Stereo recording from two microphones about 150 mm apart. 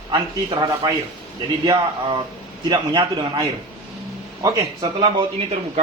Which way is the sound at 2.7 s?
30° right (ahead or behind).